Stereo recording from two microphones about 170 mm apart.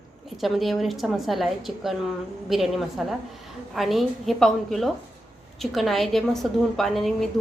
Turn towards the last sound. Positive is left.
turn(degrees=0)  # may be behind; listen again after turning